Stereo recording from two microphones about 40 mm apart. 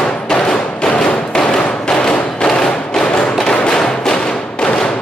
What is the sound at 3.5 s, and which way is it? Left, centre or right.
Music, left.